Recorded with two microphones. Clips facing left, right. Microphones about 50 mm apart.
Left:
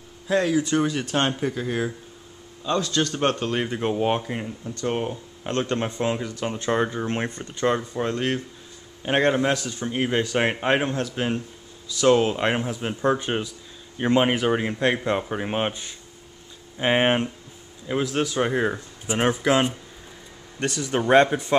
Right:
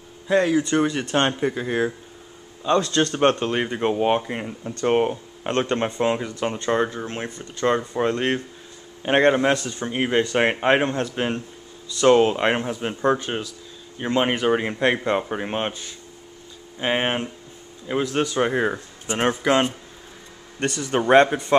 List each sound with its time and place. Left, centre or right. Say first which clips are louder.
0.3 s speech: right 2 dB; centre
2.6 s speech: right 4 dB; right
4.6 s speech: right 7 dB; right
5.8 s speech: right 3 dB; centre
6.6 s speech: right 1 dB; centre
7.9 s speech: right 3 dB; centre
13.2 s speech: left 1 dB; centre
14.2 s speech: right 1 dB; centre
15.5 s speech: left 1 dB; centre
17.8 s speech: right 1 dB; centre